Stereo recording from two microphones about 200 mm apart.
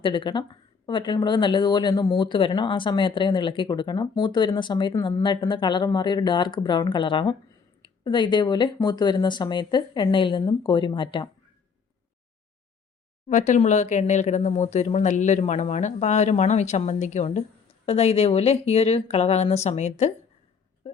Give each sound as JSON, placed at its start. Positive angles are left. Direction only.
{"t": 0.0, "sound": "speech", "side_deg": 25}
{"t": 13.2, "sound": "speech", "side_deg": 35}
{"t": 20.8, "sound": "a sound", "side_deg": 25}